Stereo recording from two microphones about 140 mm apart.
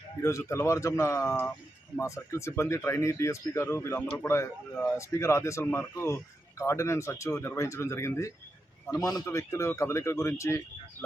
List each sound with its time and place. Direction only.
0.2 s speech: 20° left (ahead or behind)